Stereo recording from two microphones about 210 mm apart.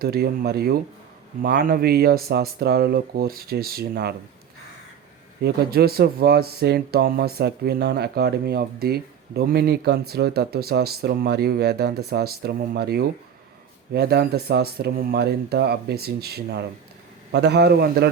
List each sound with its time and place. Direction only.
0.0 s speech: 45° right (ahead or behind)
5.4 s speech: 50° right (ahead or behind)